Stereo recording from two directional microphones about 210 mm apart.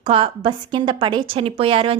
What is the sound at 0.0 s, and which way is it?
A woman's voice, 25° right (ahead or behind).